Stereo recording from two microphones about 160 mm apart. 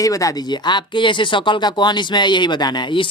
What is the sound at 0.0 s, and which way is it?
Speech, 20° left (ahead or behind).